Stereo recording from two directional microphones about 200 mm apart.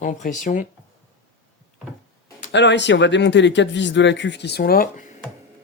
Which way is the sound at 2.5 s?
60° left (ahead or behind).